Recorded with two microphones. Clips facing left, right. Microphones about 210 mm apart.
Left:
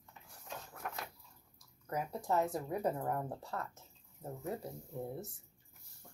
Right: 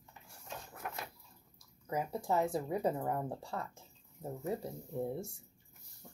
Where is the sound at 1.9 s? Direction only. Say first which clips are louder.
Right 1 dB; 5° right (ahead or behind).